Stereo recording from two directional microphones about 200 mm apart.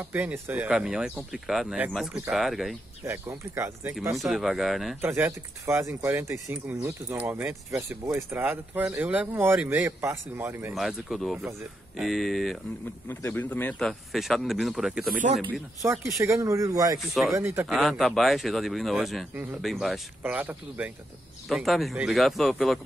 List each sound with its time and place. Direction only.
0.0 s speech: 10° right (ahead or behind)
3.1 s speech: 15° right (ahead or behind)
4.2 s speech: centre (ahead or behind)
5.0 s speech: 10° right (ahead or behind)
10.7 s speech: centre (ahead or behind)
16.2 s speech: 15° right (ahead or behind)
17.1 s speech: centre (ahead or behind)
17.4 s speech: 15° right (ahead or behind)
17.6 s speech: centre (ahead or behind)